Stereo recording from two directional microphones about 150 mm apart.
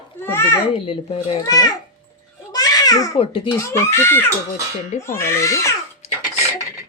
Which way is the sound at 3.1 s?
35° left (ahead or behind).